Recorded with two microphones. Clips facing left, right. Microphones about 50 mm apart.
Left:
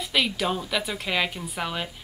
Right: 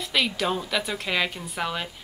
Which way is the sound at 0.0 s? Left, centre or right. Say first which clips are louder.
Even; centre.